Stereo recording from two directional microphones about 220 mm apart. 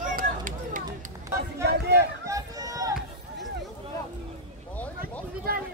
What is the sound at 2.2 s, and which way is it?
Run, 15° right (ahead or behind).